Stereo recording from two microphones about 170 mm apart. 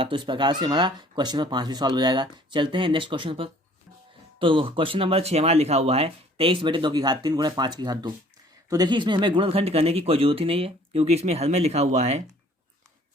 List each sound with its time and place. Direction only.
0.0 s speech: 30° right (ahead or behind)